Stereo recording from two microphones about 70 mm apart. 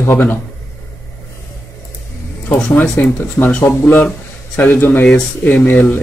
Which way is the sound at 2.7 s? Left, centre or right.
Left.